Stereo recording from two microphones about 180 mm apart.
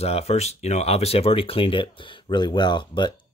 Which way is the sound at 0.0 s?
35° left (ahead or behind).